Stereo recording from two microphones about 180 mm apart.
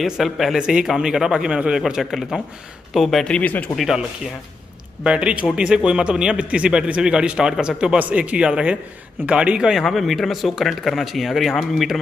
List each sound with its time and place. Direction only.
0.0 s a man's voice: centre (ahead or behind)
5.0 s a man's voice: 5° right (ahead or behind)